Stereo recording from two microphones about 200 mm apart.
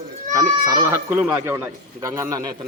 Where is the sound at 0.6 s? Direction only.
15° right (ahead or behind).